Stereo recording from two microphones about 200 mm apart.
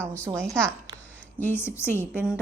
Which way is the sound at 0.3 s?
15° right (ahead or behind).